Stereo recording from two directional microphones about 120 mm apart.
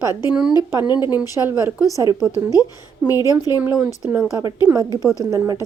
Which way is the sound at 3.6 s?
10° right (ahead or behind).